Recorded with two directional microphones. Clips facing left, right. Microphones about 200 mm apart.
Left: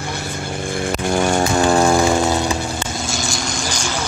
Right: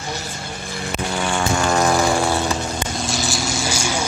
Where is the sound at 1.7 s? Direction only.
30° left (ahead or behind); by 2.8 s 10° left (ahead or behind).